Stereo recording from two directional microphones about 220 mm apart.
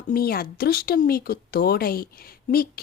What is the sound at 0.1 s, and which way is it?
Speech, 45° left (ahead or behind).